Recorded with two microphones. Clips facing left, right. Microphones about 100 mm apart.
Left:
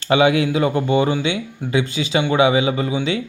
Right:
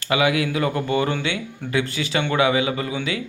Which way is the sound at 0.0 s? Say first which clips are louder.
Left 5 dB; 25° left (ahead or behind).